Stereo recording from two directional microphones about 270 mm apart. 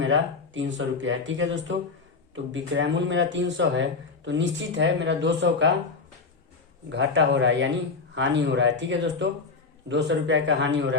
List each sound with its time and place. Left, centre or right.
0.0 s a woman's voice: right
6.9 s a woman's voice: right